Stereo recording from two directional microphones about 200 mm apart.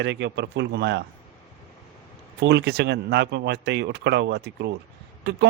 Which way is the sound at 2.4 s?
60° right (ahead or behind).